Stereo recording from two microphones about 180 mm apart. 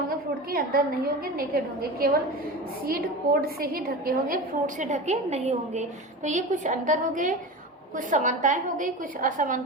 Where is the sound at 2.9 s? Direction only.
55° right (ahead or behind).